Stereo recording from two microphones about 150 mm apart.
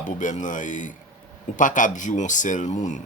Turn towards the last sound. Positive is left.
turn(degrees=55)  # may be behind; listen again after turning